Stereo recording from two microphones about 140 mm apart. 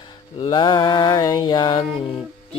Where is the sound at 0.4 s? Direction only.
35° left (ahead or behind).